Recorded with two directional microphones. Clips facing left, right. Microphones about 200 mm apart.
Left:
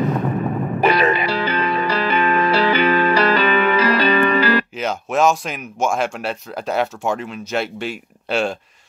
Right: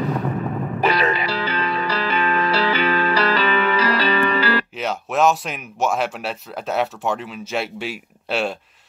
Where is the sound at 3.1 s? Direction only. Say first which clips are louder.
Left 3 dB; 50° left (ahead or behind).